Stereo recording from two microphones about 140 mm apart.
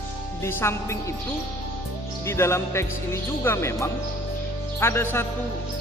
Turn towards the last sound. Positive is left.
turn(degrees=15)  # may be behind; listen again after turning